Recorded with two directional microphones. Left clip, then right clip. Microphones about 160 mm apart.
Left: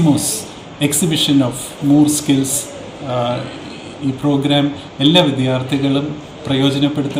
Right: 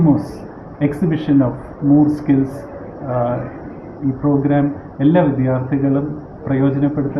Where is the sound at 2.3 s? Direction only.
10° left (ahead or behind).